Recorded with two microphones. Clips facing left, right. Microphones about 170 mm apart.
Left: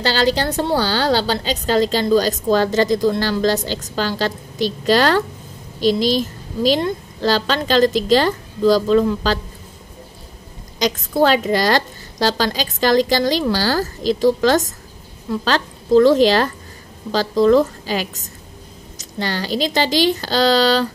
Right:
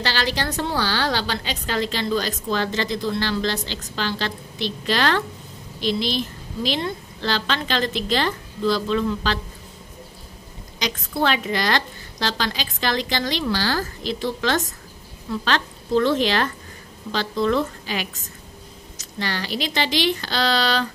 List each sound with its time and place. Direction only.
0.0 s a woman's voice: 30° left (ahead or behind)
10.8 s a woman's voice: 35° left (ahead or behind)